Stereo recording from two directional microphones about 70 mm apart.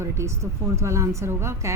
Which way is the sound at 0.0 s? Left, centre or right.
Right.